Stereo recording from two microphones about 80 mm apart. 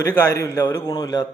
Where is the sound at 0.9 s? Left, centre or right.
Left.